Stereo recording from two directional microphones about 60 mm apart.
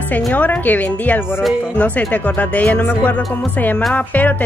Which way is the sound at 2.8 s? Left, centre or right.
Left.